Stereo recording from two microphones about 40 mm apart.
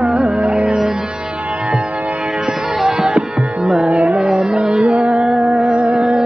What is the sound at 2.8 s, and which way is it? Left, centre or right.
Music, centre.